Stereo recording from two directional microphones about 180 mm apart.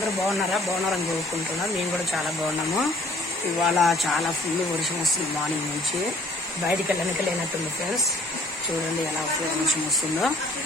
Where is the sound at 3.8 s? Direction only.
Centre (ahead or behind).